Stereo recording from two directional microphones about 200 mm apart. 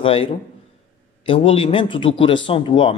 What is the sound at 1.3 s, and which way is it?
A man's voice, 25° left (ahead or behind).